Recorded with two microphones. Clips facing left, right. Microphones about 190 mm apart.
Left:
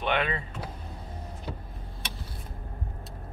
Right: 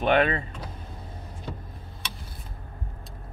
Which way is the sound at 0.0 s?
45° right (ahead or behind).